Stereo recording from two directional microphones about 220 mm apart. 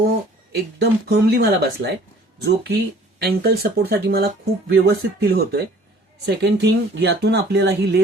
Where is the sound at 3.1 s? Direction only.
45° right (ahead or behind).